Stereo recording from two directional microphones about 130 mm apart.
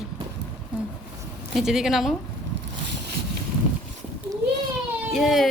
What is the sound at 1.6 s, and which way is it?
Speech, 5° right (ahead or behind).